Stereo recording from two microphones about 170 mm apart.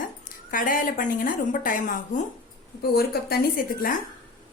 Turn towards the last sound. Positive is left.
turn(degrees=55)  # may be behind; listen again after turning